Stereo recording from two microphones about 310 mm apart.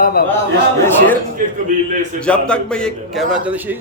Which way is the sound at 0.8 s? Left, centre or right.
Centre.